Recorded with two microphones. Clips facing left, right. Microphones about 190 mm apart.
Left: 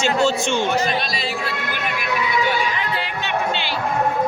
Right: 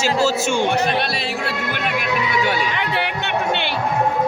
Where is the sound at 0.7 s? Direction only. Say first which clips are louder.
Right 2 dB; 65° right (ahead or behind).